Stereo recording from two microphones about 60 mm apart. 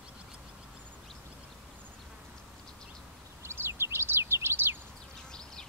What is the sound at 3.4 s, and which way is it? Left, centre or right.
Bird, right.